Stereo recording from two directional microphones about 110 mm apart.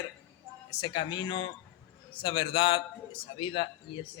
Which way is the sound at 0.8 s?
45° left (ahead or behind).